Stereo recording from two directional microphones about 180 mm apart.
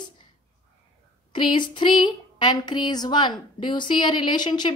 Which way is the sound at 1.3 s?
25° left (ahead or behind).